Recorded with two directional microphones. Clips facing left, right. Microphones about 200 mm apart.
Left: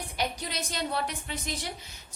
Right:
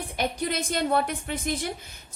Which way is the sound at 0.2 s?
50° right (ahead or behind).